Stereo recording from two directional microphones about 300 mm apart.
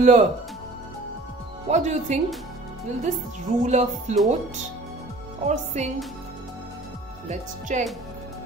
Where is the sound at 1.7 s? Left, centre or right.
Right.